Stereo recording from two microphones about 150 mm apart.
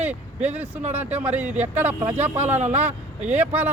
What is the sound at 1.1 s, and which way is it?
Speech, 10° right (ahead or behind).